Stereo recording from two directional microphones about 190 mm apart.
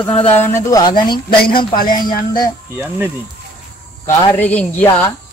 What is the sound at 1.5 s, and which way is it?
Speech, 50° left (ahead or behind).